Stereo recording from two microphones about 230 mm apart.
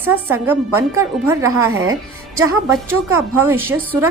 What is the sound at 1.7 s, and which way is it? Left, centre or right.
Speech, right.